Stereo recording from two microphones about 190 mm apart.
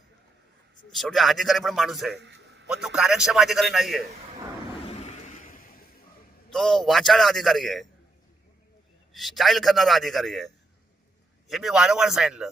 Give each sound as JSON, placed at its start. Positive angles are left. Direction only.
{"t": 0.9, "sound": "a man's voice", "side_deg": 0}
{"t": 2.1, "sound": "a sound", "side_deg": -65}
{"t": 2.6, "sound": "a man's voice", "side_deg": -5}
{"t": 4.9, "sound": "a sound", "side_deg": 35}
{"t": 6.5, "sound": "a man's voice", "side_deg": 0}
{"t": 9.1, "sound": "a man's voice", "side_deg": 0}